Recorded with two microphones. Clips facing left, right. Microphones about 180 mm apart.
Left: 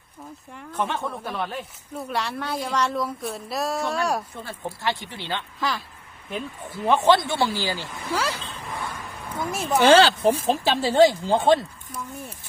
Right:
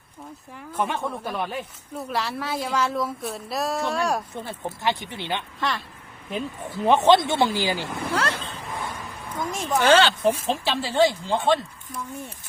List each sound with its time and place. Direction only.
0.5 s speech: 5° right (ahead or behind)
4.4 s speech: 20° right (ahead or behind)
5.5 s speech: centre (ahead or behind)
6.8 s speech: 20° right (ahead or behind)
7.9 s speech: 55° right (ahead or behind)
8.1 s a woman's voice: 5° left (ahead or behind)
9.8 s speech: 35° left (ahead or behind)